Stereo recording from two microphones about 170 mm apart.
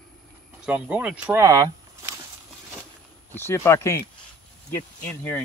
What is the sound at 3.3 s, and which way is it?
Speech, 15° left (ahead or behind).